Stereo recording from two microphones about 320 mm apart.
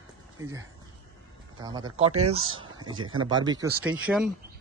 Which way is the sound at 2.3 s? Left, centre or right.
Centre.